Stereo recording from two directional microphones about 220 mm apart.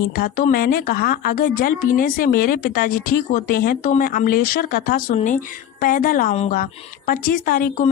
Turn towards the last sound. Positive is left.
turn(degrees=40)  # may be behind; listen again after turning